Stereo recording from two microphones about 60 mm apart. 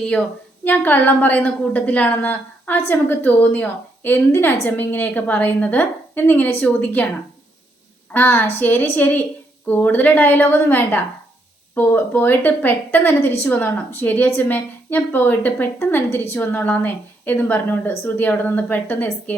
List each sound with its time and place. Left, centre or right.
0.0 s a woman's voice: left
8.1 s a woman's voice: left